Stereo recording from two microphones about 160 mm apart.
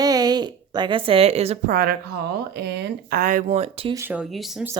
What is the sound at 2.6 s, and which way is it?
Speech, 90° right.